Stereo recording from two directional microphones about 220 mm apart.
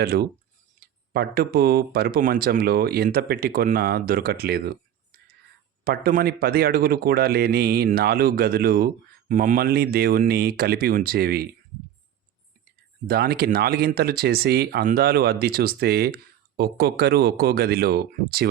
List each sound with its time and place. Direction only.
0.0 s speech: 45° right (ahead or behind)
0.8 s a sound: 35° right (ahead or behind)
1.1 s speech: 45° right (ahead or behind)
5.8 s speech: 45° right (ahead or behind)
13.1 s speech: 45° right (ahead or behind)